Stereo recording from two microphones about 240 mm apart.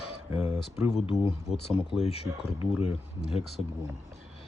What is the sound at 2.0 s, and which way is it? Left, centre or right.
Speech, left.